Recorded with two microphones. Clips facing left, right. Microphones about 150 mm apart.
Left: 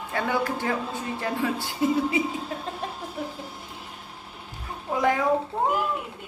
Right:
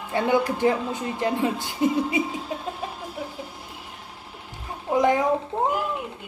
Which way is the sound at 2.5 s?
15° right (ahead or behind).